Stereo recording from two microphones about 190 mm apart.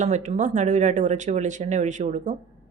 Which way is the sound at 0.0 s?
40° right (ahead or behind).